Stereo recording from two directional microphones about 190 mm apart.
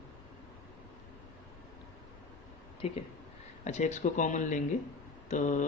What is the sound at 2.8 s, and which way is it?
Speech, 35° left (ahead or behind).